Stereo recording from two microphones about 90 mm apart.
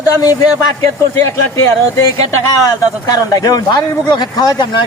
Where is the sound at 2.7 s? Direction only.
45° left (ahead or behind).